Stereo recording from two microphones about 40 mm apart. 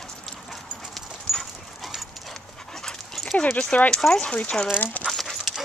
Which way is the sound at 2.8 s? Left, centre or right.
Centre.